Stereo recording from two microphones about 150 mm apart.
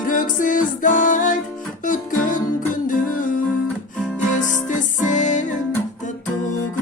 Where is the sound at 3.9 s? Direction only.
5° left (ahead or behind).